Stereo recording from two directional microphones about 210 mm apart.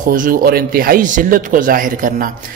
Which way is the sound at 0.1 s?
40° right (ahead or behind).